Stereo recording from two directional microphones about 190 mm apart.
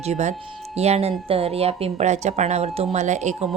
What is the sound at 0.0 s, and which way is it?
A woman's voice, 35° right (ahead or behind).